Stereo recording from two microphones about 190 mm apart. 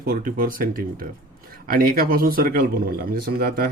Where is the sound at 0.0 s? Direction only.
45° right (ahead or behind).